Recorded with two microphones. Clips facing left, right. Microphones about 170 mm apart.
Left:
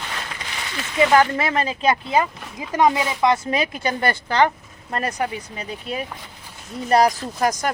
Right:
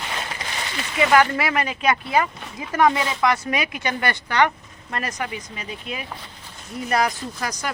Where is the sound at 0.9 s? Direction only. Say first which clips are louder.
Left 1 dB; 25° left (ahead or behind).